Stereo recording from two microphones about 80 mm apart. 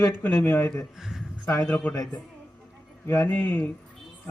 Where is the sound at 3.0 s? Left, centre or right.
Left.